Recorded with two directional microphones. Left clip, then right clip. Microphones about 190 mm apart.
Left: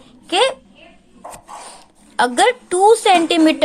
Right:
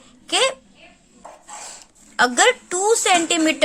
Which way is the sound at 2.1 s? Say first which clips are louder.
Left 2 dB; 10° right (ahead or behind).